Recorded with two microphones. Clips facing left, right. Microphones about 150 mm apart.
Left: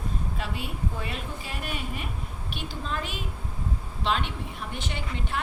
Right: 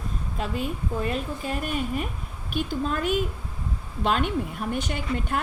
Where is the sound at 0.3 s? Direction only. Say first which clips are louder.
Right 5 dB; 45° right (ahead or behind).